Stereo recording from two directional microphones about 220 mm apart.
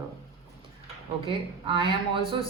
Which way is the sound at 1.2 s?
25° right (ahead or behind).